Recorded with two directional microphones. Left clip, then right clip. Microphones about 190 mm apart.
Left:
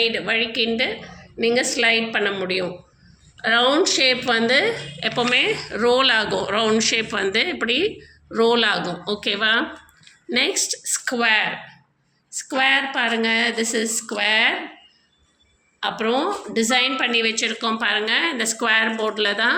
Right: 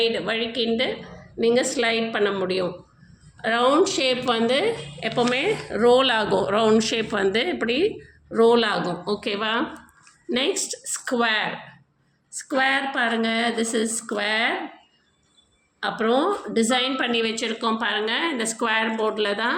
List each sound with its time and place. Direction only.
0.0 s a woman's voice: 10° right (ahead or behind)
15.8 s a woman's voice: 20° right (ahead or behind)